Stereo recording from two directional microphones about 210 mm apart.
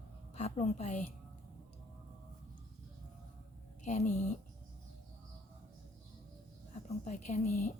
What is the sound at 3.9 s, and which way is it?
Speech, 35° left (ahead or behind).